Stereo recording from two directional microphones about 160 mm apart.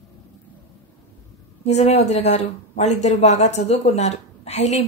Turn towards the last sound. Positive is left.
turn(degrees=45)  # may be behind; listen again after turning